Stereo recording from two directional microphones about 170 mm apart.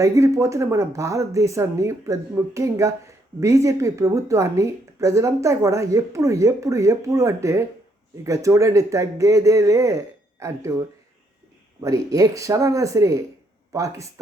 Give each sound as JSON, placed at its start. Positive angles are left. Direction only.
{"t": 0.0, "sound": "a woman's voice", "side_deg": -20}